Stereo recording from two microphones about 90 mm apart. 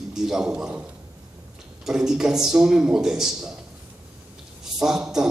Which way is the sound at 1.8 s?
5° right (ahead or behind).